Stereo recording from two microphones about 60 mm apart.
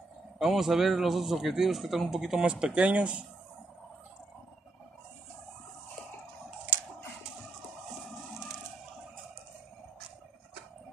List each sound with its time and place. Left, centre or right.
0.4 s speech: centre
2.4 s speech: centre